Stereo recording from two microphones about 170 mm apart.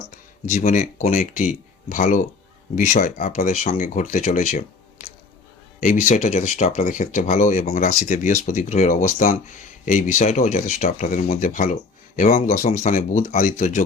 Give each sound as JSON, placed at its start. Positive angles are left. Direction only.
{"t": 0.1, "sound": "speech", "side_deg": 45}